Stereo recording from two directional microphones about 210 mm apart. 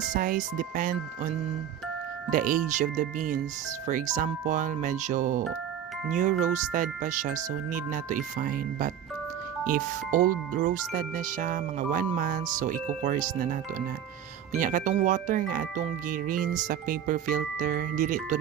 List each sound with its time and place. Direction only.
0.1 s speech: 40° right (ahead or behind)
2.3 s speech: 40° right (ahead or behind)